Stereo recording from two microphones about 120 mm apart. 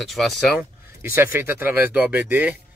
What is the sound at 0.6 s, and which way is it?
Speech, 20° right (ahead or behind).